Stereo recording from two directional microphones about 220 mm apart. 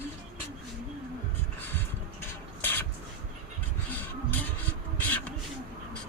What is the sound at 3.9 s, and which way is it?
Music, 10° left (ahead or behind).